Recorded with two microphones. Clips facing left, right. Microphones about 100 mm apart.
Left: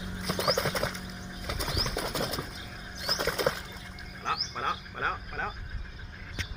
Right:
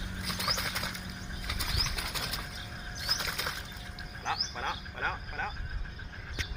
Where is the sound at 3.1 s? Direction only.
35° left (ahead or behind).